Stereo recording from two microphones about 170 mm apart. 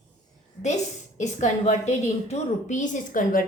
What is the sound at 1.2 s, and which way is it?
A woman's voice, 45° left (ahead or behind).